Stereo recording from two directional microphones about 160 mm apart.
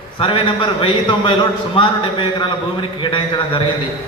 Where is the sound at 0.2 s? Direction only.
30° left (ahead or behind).